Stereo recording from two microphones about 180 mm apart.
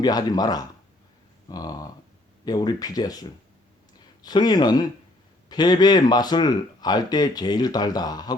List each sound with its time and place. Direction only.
0.0 s speech: 20° left (ahead or behind)